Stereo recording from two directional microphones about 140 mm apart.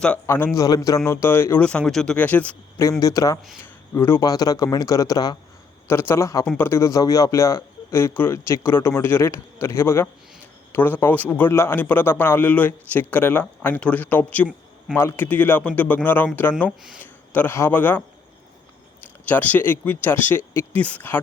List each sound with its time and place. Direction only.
0.3 s a man's voice: 15° left (ahead or behind)
3.0 s speech: 25° left (ahead or behind)
3.6 s a sound: 15° left (ahead or behind)
4.2 s speech: 25° left (ahead or behind)
5.9 s a man's voice: 15° left (ahead or behind)
16.6 s speech: 5° right (ahead or behind)
17.0 s a man's voice: 15° left (ahead or behind)
19.2 s a man's voice: 10° left (ahead or behind)